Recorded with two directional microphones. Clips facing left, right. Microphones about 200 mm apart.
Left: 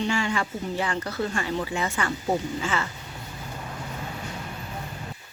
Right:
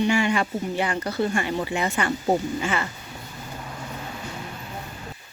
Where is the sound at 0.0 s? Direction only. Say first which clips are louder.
Right 5 dB; 15° right (ahead or behind).